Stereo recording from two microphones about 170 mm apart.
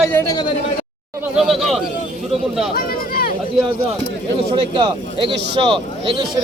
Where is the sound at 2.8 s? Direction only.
60° left (ahead or behind).